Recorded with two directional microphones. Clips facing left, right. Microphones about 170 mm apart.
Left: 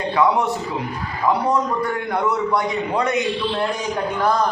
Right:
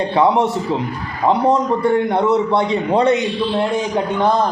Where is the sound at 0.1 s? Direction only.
25° right (ahead or behind).